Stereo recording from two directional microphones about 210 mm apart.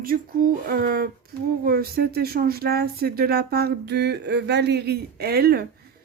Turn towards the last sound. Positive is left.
turn(degrees=-50)  # may be behind; listen again after turning